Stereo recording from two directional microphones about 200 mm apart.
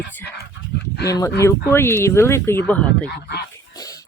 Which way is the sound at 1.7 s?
10° left (ahead or behind).